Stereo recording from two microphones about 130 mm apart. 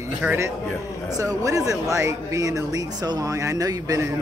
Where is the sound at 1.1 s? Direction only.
25° right (ahead or behind).